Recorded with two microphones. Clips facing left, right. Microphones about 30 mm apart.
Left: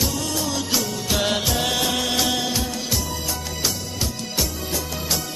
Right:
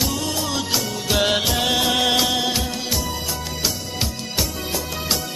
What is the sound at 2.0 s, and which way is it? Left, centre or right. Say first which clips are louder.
Music: right 4 dB; right.